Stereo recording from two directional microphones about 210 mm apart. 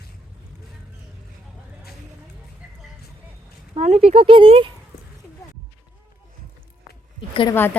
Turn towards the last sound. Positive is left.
turn(degrees=25)  # may be behind; listen again after turning